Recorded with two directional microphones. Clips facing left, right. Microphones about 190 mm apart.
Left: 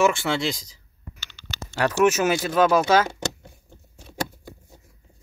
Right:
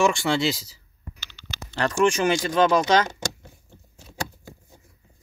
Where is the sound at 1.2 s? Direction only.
45° left (ahead or behind).